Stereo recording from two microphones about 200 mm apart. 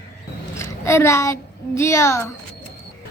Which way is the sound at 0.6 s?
15° left (ahead or behind).